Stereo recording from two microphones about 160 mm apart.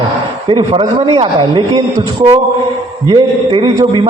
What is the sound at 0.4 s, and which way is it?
A man's voice, 30° right (ahead or behind).